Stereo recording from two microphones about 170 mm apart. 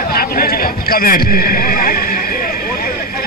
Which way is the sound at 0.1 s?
60° left (ahead or behind).